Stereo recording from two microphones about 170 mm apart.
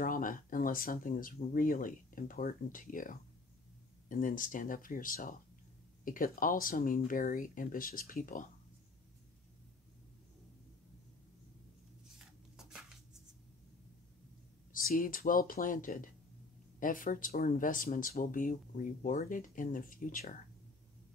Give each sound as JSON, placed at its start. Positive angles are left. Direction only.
{"t": 0.0, "sound": "speech", "side_deg": 55}
{"t": 12.5, "sound": "a sound", "side_deg": -5}
{"t": 14.7, "sound": "speech", "side_deg": 55}